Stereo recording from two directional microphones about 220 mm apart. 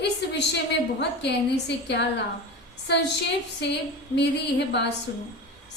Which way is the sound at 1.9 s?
50° left (ahead or behind).